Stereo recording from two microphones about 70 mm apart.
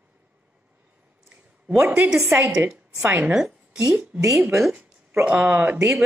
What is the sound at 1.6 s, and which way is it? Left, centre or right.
Speech, centre.